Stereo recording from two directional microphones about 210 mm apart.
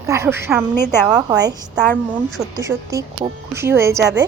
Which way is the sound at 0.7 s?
10° left (ahead or behind).